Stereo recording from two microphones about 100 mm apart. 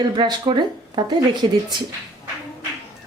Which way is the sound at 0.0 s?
45° right (ahead or behind).